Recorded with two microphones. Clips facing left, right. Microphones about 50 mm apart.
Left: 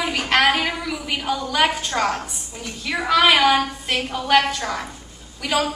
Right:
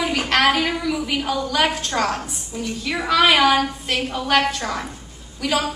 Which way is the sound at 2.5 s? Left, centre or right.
Centre.